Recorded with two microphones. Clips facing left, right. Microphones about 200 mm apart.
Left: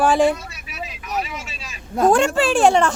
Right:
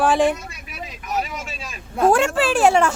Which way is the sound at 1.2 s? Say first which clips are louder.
Right 1 dB; 50° right (ahead or behind).